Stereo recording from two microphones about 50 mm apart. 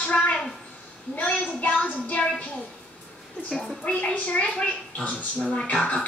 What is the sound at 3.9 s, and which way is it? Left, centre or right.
A woman's voice, left.